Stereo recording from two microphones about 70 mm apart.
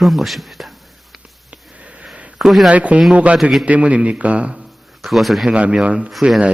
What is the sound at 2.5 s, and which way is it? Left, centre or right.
Speech, centre.